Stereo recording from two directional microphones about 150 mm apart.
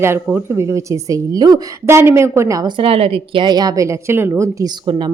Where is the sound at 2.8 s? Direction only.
40° right (ahead or behind); by 4.7 s 20° right (ahead or behind).